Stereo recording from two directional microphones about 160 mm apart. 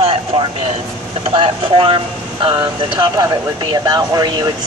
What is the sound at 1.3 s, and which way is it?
Speech, 35° right (ahead or behind).